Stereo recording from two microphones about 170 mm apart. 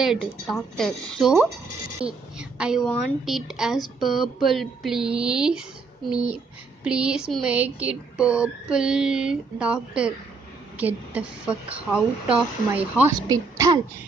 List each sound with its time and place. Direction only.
0.0 s a woman's voice: centre (ahead or behind)
13.3 s a woman's voice: 20° right (ahead or behind)